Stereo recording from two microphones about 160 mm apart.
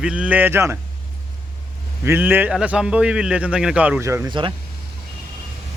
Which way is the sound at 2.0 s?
15° right (ahead or behind).